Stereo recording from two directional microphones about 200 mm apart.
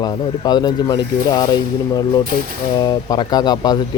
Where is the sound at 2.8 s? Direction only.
20° left (ahead or behind).